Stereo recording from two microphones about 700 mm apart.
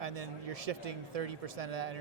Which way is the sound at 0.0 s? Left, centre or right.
Right.